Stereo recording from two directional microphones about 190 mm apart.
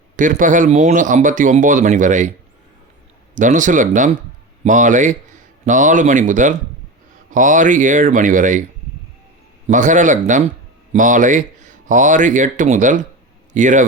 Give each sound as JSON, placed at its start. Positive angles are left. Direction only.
{"t": 0.2, "sound": "speech", "side_deg": -45}
{"t": 3.3, "sound": "speech", "side_deg": -45}
{"t": 9.6, "sound": "a man's voice", "side_deg": -40}